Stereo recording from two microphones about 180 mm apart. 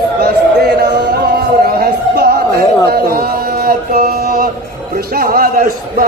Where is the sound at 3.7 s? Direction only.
55° right (ahead or behind).